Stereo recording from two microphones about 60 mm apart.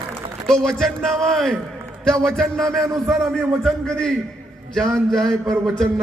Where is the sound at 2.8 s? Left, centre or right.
Right.